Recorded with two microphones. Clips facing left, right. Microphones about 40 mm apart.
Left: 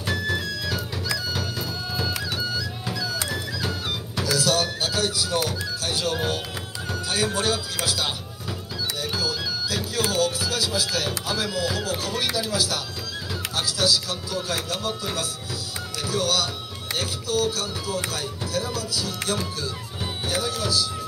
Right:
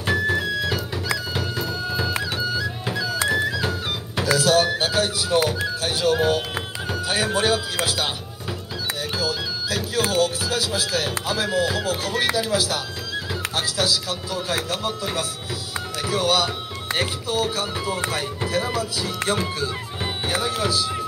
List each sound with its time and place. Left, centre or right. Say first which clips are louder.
0.0 s music: right 5 dB; right
5.9 s speech: right 7 dB; centre
6.9 s speech: right 2 dB; right
9.1 s music: right 2 dB; right
10.1 s speech: right 2 dB; right
16.1 s speech: right 4 dB; right